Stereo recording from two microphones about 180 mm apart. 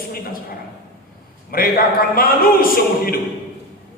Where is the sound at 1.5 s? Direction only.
55° left (ahead or behind).